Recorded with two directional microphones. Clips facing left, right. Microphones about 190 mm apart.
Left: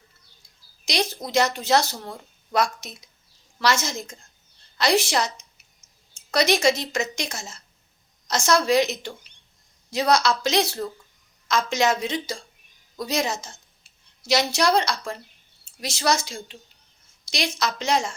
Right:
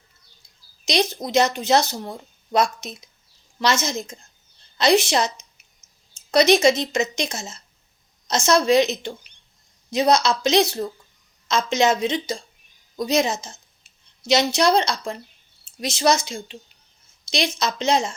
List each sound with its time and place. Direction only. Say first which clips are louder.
0.9 s speech: right 4 dB; 20° right (ahead or behind)